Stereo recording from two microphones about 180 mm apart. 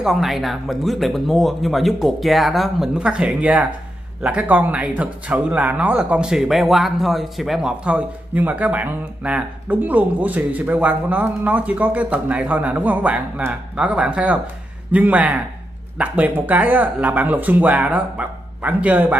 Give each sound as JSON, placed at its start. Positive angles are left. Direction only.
{"t": 0.0, "sound": "speech", "side_deg": 0}